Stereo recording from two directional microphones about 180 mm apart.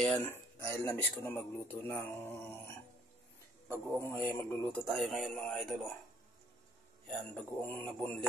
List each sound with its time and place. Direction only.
0.0 s speech: 10° left (ahead or behind)
3.6 s a man's voice: 10° right (ahead or behind)
4.0 s speech: 15° left (ahead or behind)
4.8 s speech: centre (ahead or behind)
7.1 s speech: centre (ahead or behind)
7.6 s speech: 10° left (ahead or behind)